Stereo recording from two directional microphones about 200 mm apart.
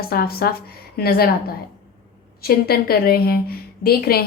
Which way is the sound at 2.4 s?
50° left (ahead or behind).